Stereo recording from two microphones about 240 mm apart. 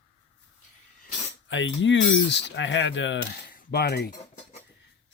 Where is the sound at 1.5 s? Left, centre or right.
Left.